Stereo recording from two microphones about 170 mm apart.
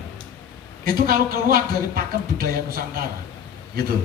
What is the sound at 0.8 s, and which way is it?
Speech, 60° right (ahead or behind).